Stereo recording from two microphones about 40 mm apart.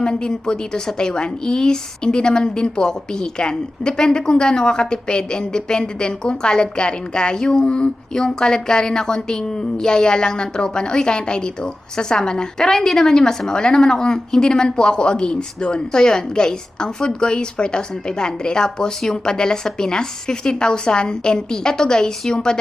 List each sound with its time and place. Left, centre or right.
0.0 s a woman's voice: left